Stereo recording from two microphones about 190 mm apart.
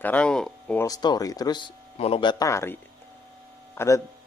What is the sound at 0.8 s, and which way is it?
A man's voice, 20° left (ahead or behind).